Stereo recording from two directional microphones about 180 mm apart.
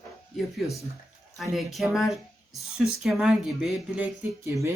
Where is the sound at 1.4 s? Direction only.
Centre (ahead or behind).